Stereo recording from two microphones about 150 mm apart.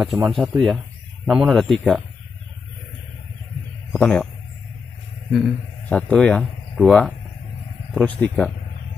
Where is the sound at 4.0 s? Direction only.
10° left (ahead or behind).